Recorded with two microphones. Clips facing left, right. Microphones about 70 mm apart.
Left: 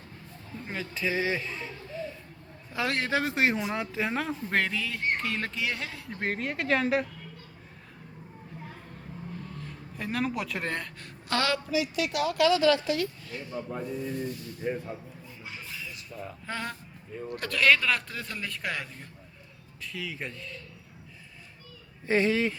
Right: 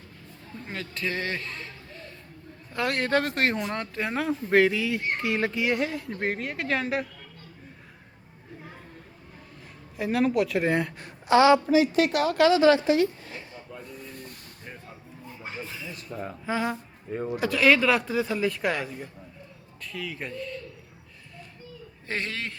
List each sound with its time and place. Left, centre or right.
0.7 s a man's voice: centre
10.0 s speech: centre
10.7 s speech: centre
11.7 s a woman's voice: right
12.5 s speech: right
13.5 s speech: left
14.3 s speech: right
14.6 s a man's voice: centre
16.5 s speech: centre
22.0 s a man's voice: centre